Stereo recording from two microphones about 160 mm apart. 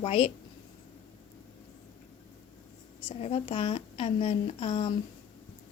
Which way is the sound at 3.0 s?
35° left (ahead or behind).